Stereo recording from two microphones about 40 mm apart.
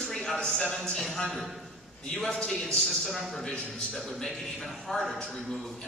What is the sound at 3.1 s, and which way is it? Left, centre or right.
Speech, centre.